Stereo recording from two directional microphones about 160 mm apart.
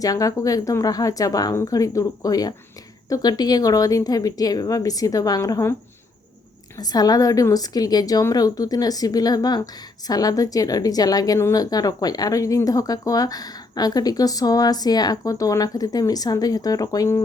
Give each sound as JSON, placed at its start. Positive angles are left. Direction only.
{"t": 0.0, "sound": "a woman's voice", "side_deg": 20}
{"t": 6.7, "sound": "a woman's voice", "side_deg": 25}